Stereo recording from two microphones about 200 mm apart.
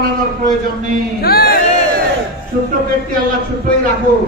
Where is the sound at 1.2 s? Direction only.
50° left (ahead or behind).